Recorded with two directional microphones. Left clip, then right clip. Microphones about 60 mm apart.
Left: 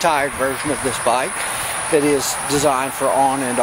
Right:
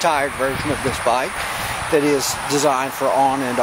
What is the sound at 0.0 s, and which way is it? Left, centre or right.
Speech, centre.